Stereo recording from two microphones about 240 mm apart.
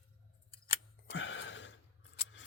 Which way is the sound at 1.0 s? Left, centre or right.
Left.